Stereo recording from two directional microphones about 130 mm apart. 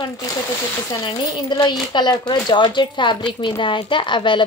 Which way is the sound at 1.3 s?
35° left (ahead or behind).